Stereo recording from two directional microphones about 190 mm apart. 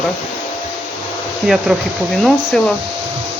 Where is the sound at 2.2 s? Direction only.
Centre (ahead or behind).